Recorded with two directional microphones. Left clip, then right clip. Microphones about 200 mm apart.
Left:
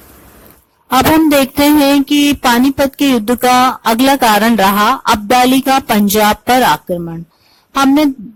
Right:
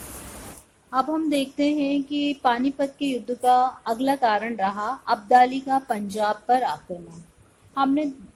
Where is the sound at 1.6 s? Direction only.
45° left (ahead or behind).